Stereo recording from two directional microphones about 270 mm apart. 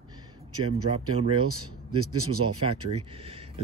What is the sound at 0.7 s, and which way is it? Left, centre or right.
Speech, centre.